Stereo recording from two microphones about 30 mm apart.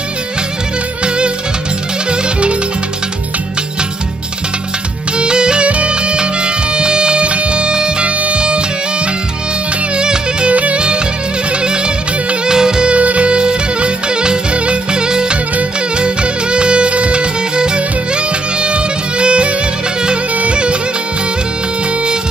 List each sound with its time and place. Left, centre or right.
1.0 s music: right
5.1 s music: right
5.7 s music: right
8.0 s music: right
10.5 s music: right
11.6 s music: right
12.9 s music: right